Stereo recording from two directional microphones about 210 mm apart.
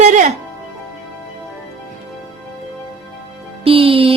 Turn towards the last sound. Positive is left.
turn(degrees=-25)  # may be behind; listen again after turning